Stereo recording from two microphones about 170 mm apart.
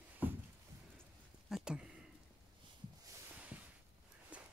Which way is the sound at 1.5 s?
5° right (ahead or behind).